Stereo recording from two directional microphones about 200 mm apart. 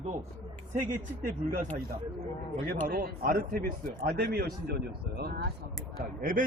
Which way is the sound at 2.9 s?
50° right (ahead or behind).